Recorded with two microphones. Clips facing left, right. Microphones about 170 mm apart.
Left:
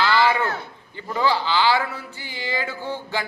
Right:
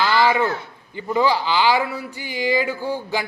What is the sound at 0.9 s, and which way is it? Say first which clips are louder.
A man's voice: right 3 dB; 15° right (ahead or behind).